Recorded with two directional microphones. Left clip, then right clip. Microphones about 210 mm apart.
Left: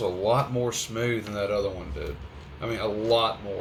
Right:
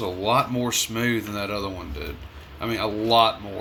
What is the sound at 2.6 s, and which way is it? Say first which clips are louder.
Speech: right 2 dB; 65° right (ahead or behind).